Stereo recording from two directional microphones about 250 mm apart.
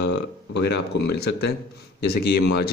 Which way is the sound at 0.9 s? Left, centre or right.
Left.